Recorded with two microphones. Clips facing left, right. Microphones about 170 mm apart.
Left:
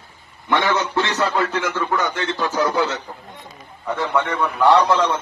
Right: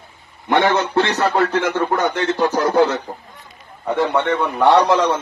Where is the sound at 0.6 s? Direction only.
60° right (ahead or behind).